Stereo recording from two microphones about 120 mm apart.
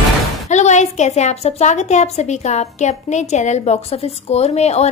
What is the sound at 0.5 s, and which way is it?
A woman's voice, 75° left (ahead or behind).